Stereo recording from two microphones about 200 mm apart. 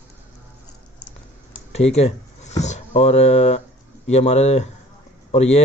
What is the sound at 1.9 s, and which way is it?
Speech, 35° left (ahead or behind).